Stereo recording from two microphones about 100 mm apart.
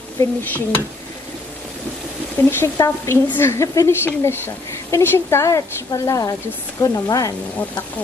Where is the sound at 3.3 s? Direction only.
25° left (ahead or behind).